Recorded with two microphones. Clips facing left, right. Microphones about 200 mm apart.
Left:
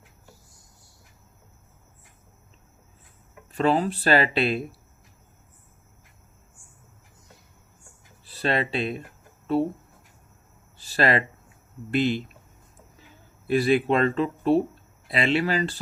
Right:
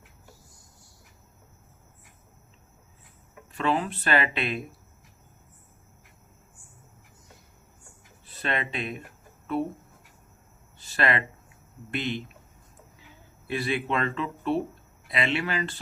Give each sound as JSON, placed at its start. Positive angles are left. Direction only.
{"t": 3.6, "sound": "speech", "side_deg": 35}
{"t": 8.2, "sound": "speech", "side_deg": 35}
{"t": 10.8, "sound": "a sound", "side_deg": 35}
{"t": 11.9, "sound": "speech", "side_deg": 35}
{"t": 13.5, "sound": "speech", "side_deg": 35}